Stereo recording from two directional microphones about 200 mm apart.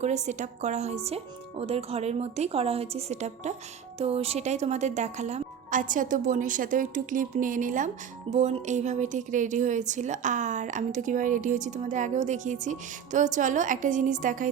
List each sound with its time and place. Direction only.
0.0 s a woman's voice: 35° right (ahead or behind)